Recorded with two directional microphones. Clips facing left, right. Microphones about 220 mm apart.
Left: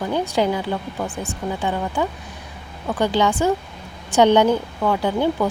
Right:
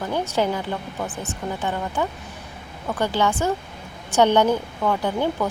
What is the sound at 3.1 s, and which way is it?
Speech, 15° left (ahead or behind).